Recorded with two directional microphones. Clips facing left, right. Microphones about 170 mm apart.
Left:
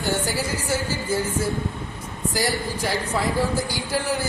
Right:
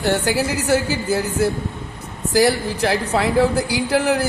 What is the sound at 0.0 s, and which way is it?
A woman's voice, 70° right (ahead or behind).